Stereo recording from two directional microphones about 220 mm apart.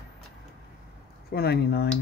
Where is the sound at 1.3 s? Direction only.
45° left (ahead or behind).